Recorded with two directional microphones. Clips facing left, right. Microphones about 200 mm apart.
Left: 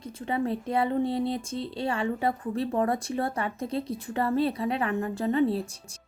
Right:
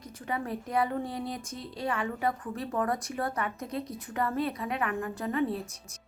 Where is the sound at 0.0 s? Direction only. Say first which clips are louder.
Left 6 dB; 25° left (ahead or behind).